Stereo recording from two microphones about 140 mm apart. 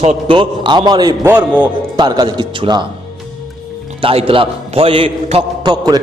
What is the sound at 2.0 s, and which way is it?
Speech, 30° right (ahead or behind).